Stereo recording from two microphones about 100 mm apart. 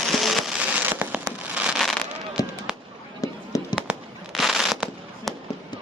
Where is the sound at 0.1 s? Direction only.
Centre (ahead or behind).